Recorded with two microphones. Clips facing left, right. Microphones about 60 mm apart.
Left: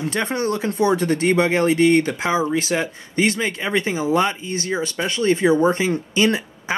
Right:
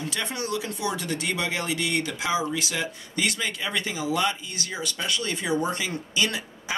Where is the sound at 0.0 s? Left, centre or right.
Left.